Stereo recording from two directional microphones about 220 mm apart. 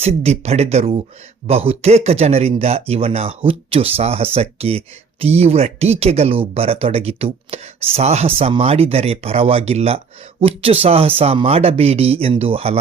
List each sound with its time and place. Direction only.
0.0 s speech: 30° right (ahead or behind)